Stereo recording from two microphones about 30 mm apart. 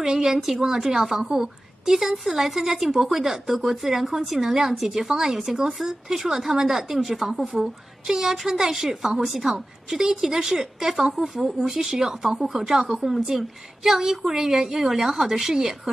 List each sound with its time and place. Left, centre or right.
0.0 s a woman's voice: centre